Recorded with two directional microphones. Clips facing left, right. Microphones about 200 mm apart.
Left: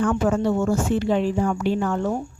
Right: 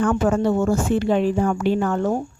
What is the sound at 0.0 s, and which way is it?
Speech, 55° right (ahead or behind).